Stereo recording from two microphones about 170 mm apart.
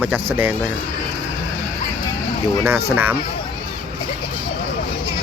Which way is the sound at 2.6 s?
15° right (ahead or behind).